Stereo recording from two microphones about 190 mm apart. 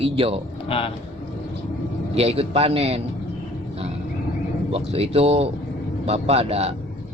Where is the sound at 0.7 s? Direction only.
30° left (ahead or behind).